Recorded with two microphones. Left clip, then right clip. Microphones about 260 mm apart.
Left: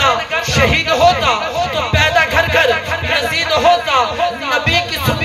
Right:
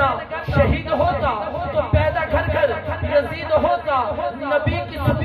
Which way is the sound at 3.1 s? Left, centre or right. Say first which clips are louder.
Left 2 dB; left.